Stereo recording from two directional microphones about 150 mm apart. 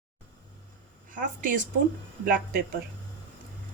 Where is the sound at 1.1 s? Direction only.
60° right (ahead or behind).